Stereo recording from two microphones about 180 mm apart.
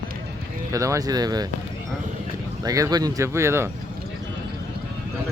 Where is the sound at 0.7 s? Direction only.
20° right (ahead or behind).